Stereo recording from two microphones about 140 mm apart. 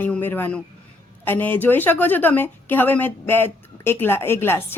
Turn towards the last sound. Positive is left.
turn(degrees=15)  # may be behind; listen again after turning